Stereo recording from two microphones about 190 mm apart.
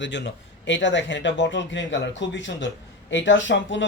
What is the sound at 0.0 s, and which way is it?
Speech, 70° left (ahead or behind).